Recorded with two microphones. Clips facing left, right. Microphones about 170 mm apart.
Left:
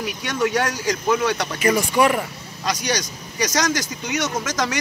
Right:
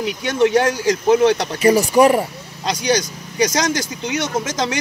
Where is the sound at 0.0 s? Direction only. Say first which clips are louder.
Right 6 dB; 25° right (ahead or behind).